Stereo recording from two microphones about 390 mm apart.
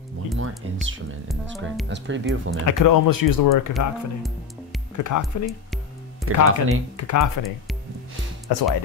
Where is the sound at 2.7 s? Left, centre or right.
Left.